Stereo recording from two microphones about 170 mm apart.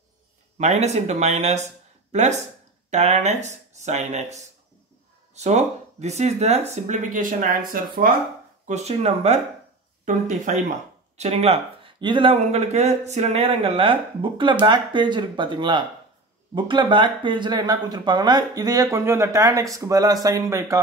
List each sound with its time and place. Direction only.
0.6 s speech: 40° right (ahead or behind); by 8.1 s 55° right (ahead or behind)
8.6 s speech: 40° right (ahead or behind); by 20.8 s 20° right (ahead or behind)